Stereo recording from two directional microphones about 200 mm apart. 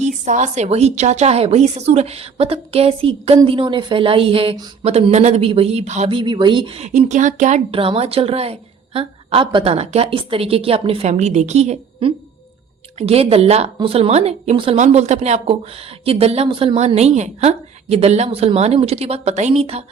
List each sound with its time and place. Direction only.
0.3 s a woman's voice: 35° right (ahead or behind)